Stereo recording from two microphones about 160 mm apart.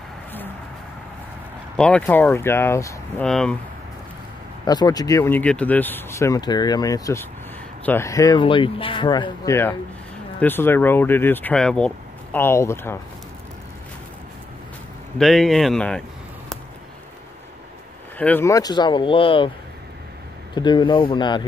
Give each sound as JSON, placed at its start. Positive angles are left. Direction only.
{"t": 1.8, "sound": "speech", "side_deg": 10}
{"t": 3.2, "sound": "speech", "side_deg": 5}
{"t": 4.6, "sound": "speech", "side_deg": 25}
{"t": 15.1, "sound": "speech", "side_deg": 0}
{"t": 18.1, "sound": "speech", "side_deg": 10}
{"t": 20.5, "sound": "speech", "side_deg": 30}